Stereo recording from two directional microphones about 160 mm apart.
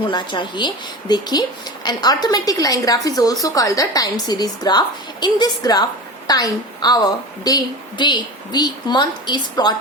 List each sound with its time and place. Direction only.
0.0 s a woman's voice: 30° left (ahead or behind)